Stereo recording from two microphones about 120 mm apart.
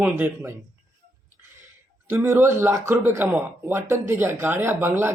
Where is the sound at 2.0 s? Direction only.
20° right (ahead or behind).